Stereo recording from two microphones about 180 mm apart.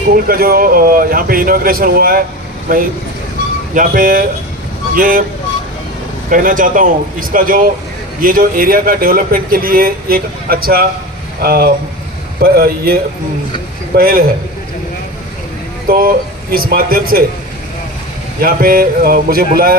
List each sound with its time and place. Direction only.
0.3 s a man's voice: 55° right (ahead or behind)
6.3 s a man's voice: 50° right (ahead or behind)
15.9 s speech: 55° right (ahead or behind)
18.4 s speech: 55° right (ahead or behind)